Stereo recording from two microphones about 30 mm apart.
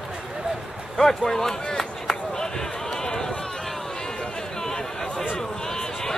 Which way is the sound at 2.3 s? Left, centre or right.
Left.